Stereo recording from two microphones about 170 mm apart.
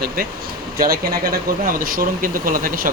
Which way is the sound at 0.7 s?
60° right (ahead or behind).